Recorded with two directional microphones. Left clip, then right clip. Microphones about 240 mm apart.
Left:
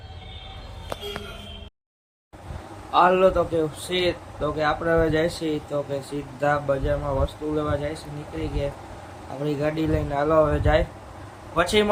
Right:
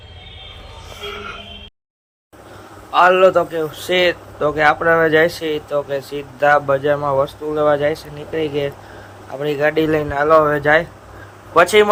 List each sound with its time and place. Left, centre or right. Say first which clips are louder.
2.9 s speech: right 6 dB; right